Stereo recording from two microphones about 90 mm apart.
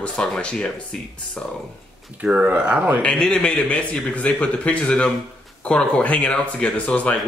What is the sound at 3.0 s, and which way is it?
Speech, 10° left (ahead or behind).